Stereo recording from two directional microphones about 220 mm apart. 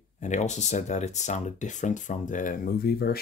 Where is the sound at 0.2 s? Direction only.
35° left (ahead or behind).